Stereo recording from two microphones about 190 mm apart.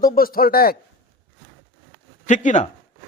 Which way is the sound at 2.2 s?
40° left (ahead or behind).